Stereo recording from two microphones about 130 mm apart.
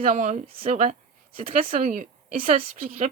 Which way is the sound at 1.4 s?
90° right.